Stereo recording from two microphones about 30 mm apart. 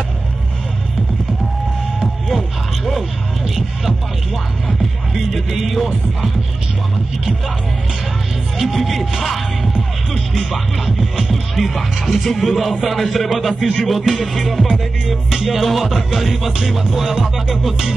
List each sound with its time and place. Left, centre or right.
2.2 s a sound: centre
4.6 s music: centre
8.5 s speech: centre
15.0 s speech: centre
16.6 s music: centre